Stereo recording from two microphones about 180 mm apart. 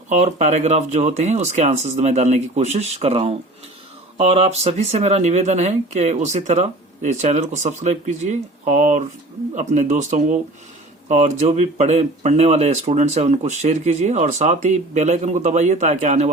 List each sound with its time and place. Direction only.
0.1 s speech: 40° right (ahead or behind)